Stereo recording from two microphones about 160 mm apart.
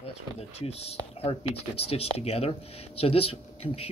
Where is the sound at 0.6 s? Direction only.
40° left (ahead or behind).